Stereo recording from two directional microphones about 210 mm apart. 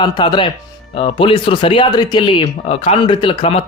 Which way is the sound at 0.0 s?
20° left (ahead or behind).